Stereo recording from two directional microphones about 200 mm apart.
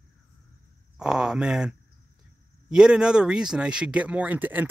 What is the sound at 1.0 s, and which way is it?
Speech, 5° right (ahead or behind).